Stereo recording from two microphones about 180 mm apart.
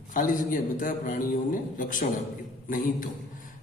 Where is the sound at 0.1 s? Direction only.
50° left (ahead or behind).